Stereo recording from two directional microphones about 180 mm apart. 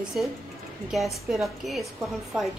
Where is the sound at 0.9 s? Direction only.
Centre (ahead or behind).